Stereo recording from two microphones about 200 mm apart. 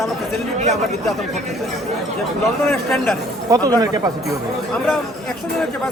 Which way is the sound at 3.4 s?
20° right (ahead or behind).